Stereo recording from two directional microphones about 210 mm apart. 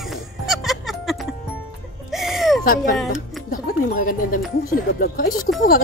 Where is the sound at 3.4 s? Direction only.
40° left (ahead or behind).